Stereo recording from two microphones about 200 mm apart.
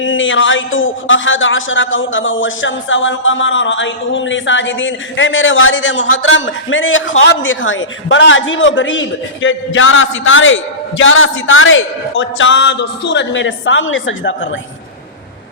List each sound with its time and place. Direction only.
0.0 s a man's voice: 70° left (ahead or behind)